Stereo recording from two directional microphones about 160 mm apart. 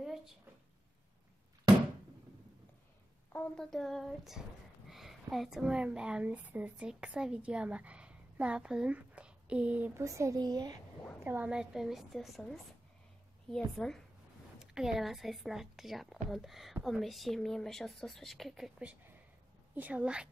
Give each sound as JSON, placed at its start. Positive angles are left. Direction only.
{"t": 0.0, "sound": "a sound", "side_deg": 0}
{"t": 3.3, "sound": "a woman's voice", "side_deg": 5}
{"t": 10.0, "sound": "speech", "side_deg": -20}
{"t": 11.2, "sound": "a woman's voice", "side_deg": -10}
{"t": 13.6, "sound": "a woman's voice", "side_deg": 0}